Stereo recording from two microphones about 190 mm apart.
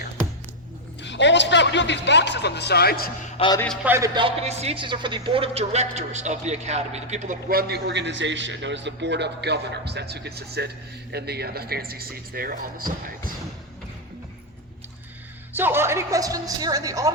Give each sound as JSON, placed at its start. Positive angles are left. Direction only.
{"t": 1.0, "sound": "a man's voice", "side_deg": 70}
{"t": 3.3, "sound": "a man's voice", "side_deg": 25}
{"t": 3.8, "sound": "a man's voice", "side_deg": -15}
{"t": 7.7, "sound": "a man's voice", "side_deg": -65}
{"t": 15.5, "sound": "a woman's voice", "side_deg": -10}